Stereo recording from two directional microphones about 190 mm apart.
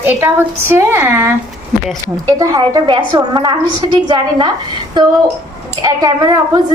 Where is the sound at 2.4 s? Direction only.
20° right (ahead or behind).